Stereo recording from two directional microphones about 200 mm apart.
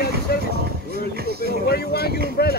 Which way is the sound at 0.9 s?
50° right (ahead or behind).